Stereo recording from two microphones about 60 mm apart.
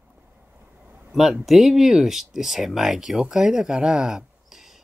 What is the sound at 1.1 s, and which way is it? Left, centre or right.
Speech, centre.